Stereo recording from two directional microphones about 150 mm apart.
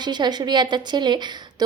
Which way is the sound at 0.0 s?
30° right (ahead or behind).